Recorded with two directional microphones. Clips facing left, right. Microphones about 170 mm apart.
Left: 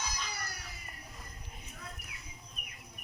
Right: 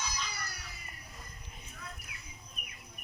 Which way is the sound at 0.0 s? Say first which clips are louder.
Even; 50° left (ahead or behind).